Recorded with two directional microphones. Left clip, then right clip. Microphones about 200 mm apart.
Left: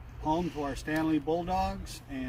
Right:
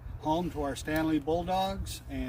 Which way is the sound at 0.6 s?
5° right (ahead or behind).